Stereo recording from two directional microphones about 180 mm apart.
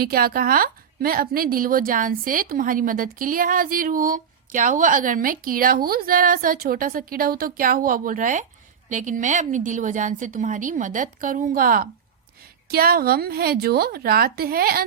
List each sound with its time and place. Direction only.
0.0 s a woman's voice: 55° right (ahead or behind)